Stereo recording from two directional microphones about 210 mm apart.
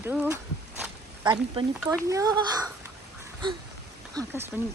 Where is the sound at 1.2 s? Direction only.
20° right (ahead or behind).